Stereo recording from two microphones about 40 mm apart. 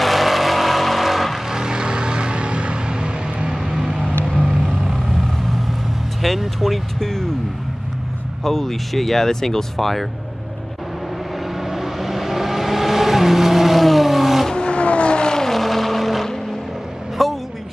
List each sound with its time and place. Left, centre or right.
0.0 s vehicle: centre
1.5 s vehicle: centre
3.5 s vehicle: centre
6.2 s music: centre
6.6 s speech: centre
8.5 s speech: centre
11.6 s vehicle: centre
14.5 s vehicle: left; by 17.3 s centre